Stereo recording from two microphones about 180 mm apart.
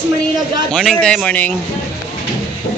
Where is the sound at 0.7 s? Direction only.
Centre (ahead or behind).